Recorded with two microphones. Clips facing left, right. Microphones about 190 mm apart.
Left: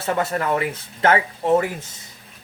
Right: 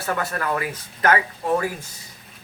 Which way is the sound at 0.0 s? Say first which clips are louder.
Left 3 dB; 25° left (ahead or behind).